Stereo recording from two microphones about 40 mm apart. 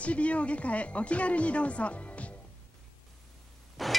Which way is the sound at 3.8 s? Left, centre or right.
Centre.